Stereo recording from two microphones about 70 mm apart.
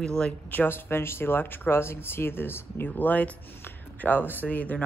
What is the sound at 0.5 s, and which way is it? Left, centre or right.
Speech, left.